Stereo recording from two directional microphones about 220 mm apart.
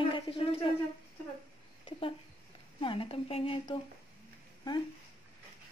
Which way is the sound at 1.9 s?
25° left (ahead or behind).